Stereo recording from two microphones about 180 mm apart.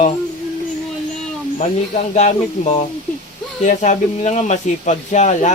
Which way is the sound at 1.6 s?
40° left (ahead or behind).